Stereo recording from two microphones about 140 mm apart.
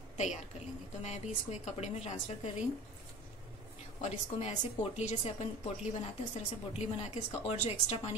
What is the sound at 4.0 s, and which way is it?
A woman's voice, 55° left (ahead or behind).